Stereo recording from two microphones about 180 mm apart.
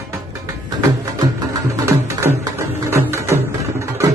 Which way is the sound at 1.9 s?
15° right (ahead or behind).